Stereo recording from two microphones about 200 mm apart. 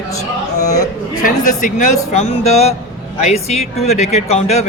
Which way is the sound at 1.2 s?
40° left (ahead or behind).